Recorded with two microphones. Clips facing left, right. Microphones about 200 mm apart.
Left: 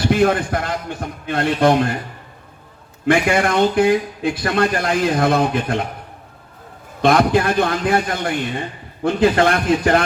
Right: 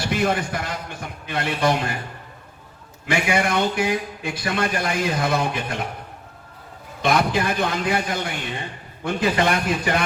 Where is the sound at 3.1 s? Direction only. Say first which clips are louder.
Left 5 dB; 55° left (ahead or behind).